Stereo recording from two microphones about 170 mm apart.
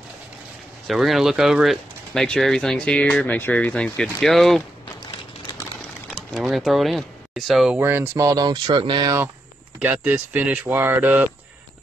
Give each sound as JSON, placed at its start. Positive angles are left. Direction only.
{"t": 0.8, "sound": "speech", "side_deg": 0}
{"t": 6.0, "sound": "speech", "side_deg": 0}
{"t": 7.8, "sound": "speech", "side_deg": -15}
{"t": 9.8, "sound": "speech", "side_deg": -5}